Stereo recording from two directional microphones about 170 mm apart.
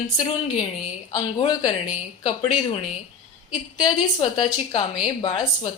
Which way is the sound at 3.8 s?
25° left (ahead or behind).